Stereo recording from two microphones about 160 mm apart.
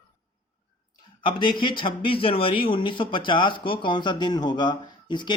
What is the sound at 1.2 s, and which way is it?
Speech, 30° left (ahead or behind).